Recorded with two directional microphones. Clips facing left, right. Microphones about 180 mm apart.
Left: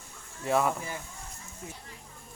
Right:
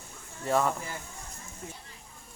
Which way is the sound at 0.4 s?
5° left (ahead or behind).